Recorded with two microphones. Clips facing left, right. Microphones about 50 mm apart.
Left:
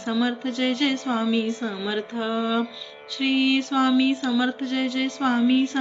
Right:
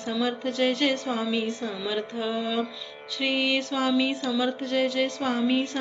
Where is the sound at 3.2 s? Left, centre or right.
Centre.